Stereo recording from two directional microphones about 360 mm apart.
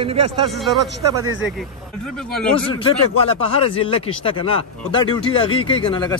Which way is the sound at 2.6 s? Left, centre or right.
Centre.